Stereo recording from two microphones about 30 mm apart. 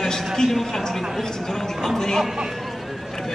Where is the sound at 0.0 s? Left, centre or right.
Centre.